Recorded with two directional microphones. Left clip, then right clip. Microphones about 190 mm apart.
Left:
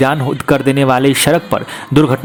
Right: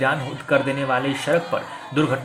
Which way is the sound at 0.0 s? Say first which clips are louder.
Left 8 dB; 55° left (ahead or behind).